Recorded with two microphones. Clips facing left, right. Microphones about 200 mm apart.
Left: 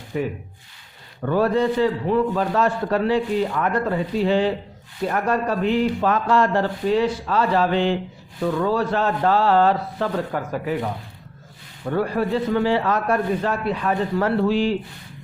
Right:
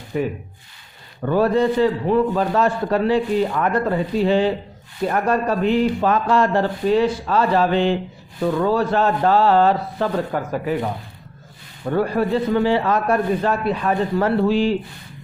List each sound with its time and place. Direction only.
0.1 s speech: 40° right (ahead or behind)
1.2 s a man's voice: 20° right (ahead or behind)
1.6 s a man's voice: 35° right (ahead or behind)
3.4 s speech: 35° right (ahead or behind)
5.3 s speech: 35° right (ahead or behind)
6.0 s speech: 20° right (ahead or behind)
6.8 s speech: 35° right (ahead or behind)
8.4 s a man's voice: 35° right (ahead or behind)
13.1 s a man's voice: 30° right (ahead or behind)